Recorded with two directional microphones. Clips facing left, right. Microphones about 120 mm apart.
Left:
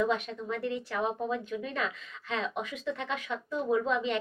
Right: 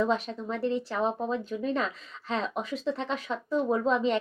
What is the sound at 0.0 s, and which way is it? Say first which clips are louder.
Speech: right 2 dB; 30° right (ahead or behind).